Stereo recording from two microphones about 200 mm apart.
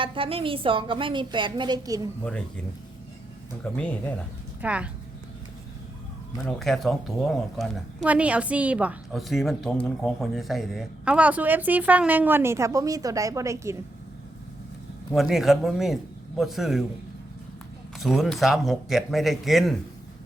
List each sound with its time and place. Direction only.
0.0 s a woman's voice: 25° right (ahead or behind)
3.6 s a man's voice: 5° left (ahead or behind)
4.6 s speech: 5° right (ahead or behind)
6.6 s speech: centre (ahead or behind); by 13.7 s 15° right (ahead or behind)
15.1 s a man's voice: centre (ahead or behind)
18.0 s a man's voice: centre (ahead or behind)